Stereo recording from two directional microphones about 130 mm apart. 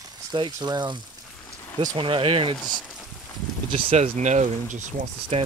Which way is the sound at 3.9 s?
65° right (ahead or behind).